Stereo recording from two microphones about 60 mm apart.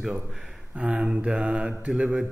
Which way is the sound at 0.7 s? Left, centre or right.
Right.